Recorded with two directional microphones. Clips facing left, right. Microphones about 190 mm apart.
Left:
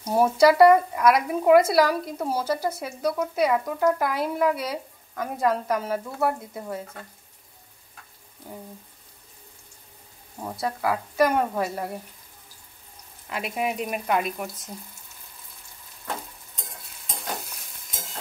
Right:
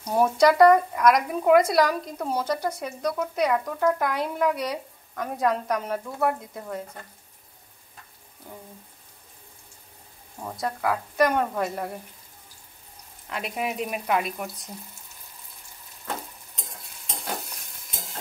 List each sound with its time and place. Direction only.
0.0 s speech: 5° left (ahead or behind)
10.4 s speech: 5° left (ahead or behind)
13.3 s speech: centre (ahead or behind)